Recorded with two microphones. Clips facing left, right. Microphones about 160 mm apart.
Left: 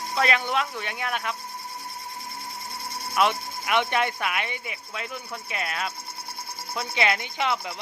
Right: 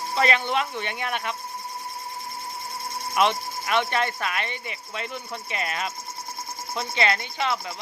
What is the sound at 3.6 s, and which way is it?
Speech, 15° left (ahead or behind).